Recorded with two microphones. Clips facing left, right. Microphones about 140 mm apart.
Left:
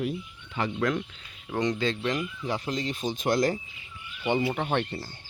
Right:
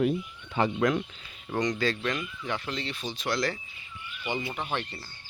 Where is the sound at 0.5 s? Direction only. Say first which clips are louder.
Right 3 dB; 25° right (ahead or behind).